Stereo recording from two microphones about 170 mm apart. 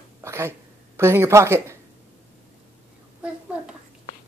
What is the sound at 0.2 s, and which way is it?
A woman's voice, 15° right (ahead or behind).